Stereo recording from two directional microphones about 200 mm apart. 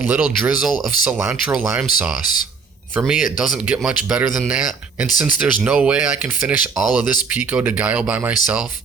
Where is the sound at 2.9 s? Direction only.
5° right (ahead or behind).